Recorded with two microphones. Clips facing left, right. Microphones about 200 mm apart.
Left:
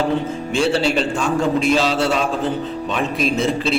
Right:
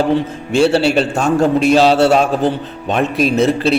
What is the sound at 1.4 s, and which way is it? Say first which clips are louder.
A man's voice: right 6 dB; 65° right (ahead or behind).